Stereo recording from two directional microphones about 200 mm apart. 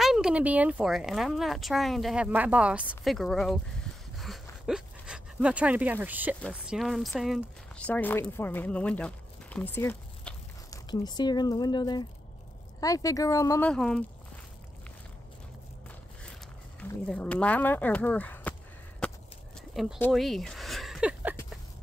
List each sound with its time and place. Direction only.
0.0 s speech: 5° right (ahead or behind); by 13.7 s 15° left (ahead or behind)
13.7 s speech: 5° left (ahead or behind)
17.1 s speech: 5° left (ahead or behind)
19.7 s speech: centre (ahead or behind)
20.1 s a sound: centre (ahead or behind)